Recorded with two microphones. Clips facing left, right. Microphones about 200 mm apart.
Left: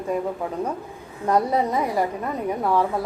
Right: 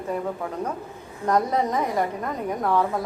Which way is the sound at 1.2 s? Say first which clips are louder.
Left 1 dB; 10° left (ahead or behind).